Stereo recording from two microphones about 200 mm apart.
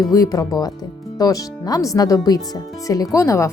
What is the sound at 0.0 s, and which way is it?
Speech, 15° left (ahead or behind).